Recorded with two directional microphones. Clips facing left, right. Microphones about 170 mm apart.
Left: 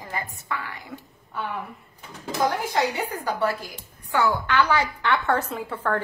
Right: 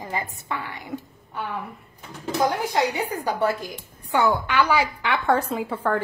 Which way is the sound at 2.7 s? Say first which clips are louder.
Right 1 dB; 15° right (ahead or behind).